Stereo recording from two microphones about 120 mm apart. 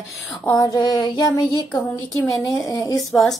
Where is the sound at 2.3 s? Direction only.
30° left (ahead or behind).